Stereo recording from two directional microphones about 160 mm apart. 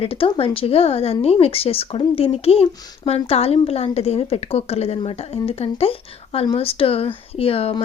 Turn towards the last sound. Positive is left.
turn(degrees=35)  # may be behind; listen again after turning